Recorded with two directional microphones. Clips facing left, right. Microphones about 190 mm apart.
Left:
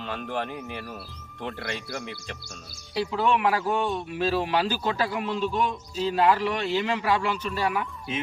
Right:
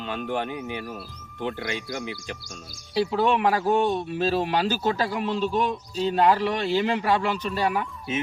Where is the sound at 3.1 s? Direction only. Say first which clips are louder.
Right 1 dB; 40° right (ahead or behind).